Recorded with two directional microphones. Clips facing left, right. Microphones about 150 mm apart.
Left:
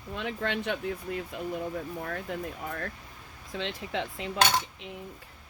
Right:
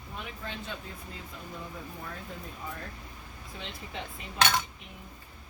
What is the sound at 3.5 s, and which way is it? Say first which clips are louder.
Speech: left 9 dB; 90° left.